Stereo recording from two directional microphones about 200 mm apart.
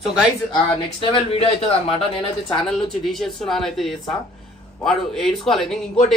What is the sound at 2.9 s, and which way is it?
Speech, centre (ahead or behind).